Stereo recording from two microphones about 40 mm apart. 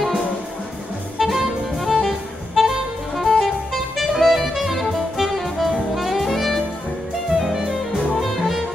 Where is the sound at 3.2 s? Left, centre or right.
Centre.